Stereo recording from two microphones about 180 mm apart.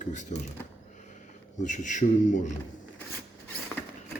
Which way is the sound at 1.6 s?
45° left (ahead or behind).